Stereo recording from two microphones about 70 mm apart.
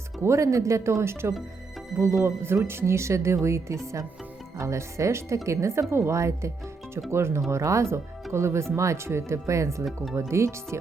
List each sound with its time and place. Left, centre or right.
0.2 s speech: right